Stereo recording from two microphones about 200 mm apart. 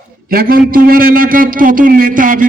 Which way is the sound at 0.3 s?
45° right (ahead or behind).